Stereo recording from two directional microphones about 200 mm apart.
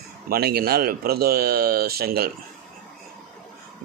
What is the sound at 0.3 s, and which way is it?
Speech, 50° right (ahead or behind).